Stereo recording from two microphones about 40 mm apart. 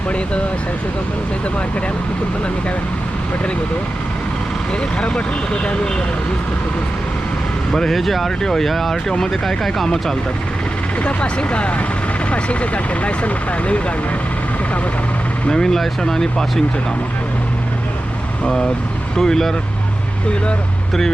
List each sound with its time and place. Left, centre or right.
4.9 s speech: left
7.7 s speech: centre
11.0 s speech: left
15.4 s speech: centre
19.1 s speech: centre